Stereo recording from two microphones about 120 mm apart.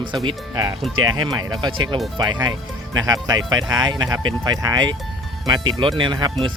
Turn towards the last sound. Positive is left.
turn(degrees=-35)  # may be behind; listen again after turning